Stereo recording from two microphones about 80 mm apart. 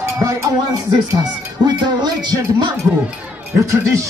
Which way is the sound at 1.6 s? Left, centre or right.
Right.